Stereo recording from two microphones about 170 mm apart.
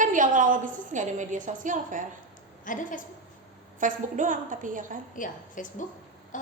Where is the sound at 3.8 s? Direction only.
50° right (ahead or behind).